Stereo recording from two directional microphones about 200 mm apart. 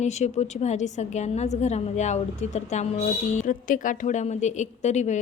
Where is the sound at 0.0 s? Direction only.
35° left (ahead or behind).